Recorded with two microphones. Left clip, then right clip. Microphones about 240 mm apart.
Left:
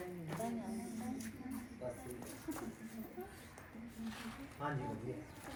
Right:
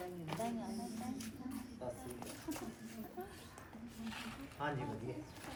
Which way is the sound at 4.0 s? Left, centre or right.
Centre.